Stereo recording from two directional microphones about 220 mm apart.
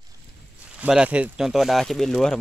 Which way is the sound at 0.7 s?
5° right (ahead or behind).